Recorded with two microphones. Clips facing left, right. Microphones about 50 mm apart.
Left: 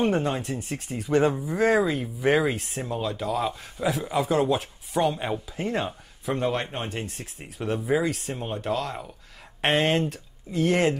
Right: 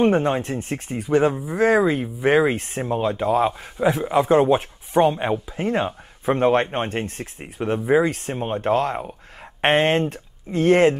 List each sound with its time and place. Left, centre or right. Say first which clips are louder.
0.0 s speech: right 6 dB; right
0.9 s speech: right 3 dB; centre
6.2 s speech: right 8 dB; right